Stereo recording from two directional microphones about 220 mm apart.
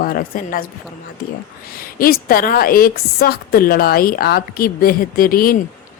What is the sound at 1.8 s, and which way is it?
A woman's voice, 40° left (ahead or behind).